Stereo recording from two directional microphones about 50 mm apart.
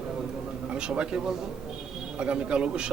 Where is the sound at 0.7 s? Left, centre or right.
Centre.